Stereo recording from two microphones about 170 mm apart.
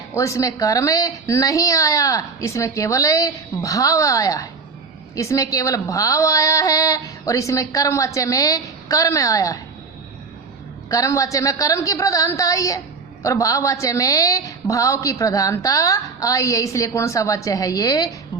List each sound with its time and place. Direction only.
0.1 s a woman's voice: 20° left (ahead or behind)
10.8 s a woman's voice: 20° left (ahead or behind)